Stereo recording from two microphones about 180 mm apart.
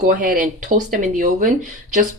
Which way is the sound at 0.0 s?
50° right (ahead or behind).